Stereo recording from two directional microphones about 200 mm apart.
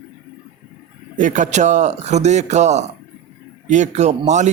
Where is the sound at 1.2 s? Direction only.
40° right (ahead or behind).